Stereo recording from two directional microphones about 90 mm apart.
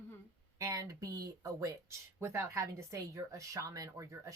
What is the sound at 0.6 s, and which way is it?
Speech, 40° right (ahead or behind).